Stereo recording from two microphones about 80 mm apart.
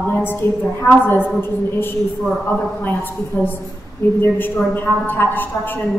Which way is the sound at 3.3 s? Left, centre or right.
Left.